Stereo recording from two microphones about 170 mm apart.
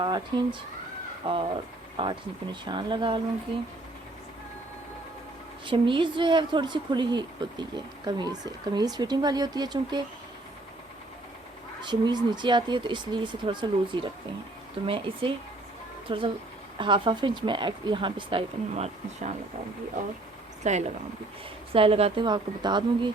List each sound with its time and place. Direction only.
0.0 s a woman's voice: 25° right (ahead or behind)
5.6 s a woman's voice: 30° right (ahead or behind)
11.8 s a woman's voice: 25° right (ahead or behind)
20.7 s speech: 45° right (ahead or behind)
21.7 s a woman's voice: 35° right (ahead or behind)